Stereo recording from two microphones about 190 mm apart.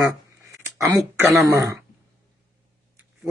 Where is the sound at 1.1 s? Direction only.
15° right (ahead or behind).